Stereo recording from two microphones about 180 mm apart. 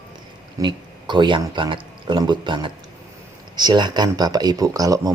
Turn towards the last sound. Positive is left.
turn(degrees=-20)  # may be behind; listen again after turning